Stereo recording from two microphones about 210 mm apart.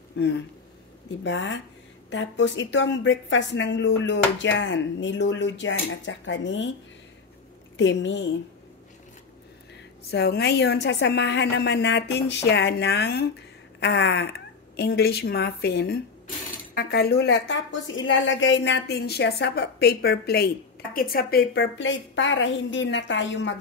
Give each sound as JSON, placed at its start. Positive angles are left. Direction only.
{"t": 0.2, "sound": "a woman's voice", "side_deg": 60}
{"t": 7.7, "sound": "a woman's voice", "side_deg": 60}
{"t": 10.1, "sound": "a woman's voice", "side_deg": 50}